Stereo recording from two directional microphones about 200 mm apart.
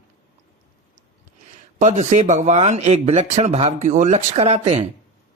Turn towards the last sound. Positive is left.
turn(degrees=-35)  # may be behind; listen again after turning